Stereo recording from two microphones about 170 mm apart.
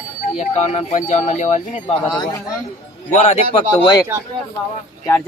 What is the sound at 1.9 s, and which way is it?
Speech, 25° left (ahead or behind).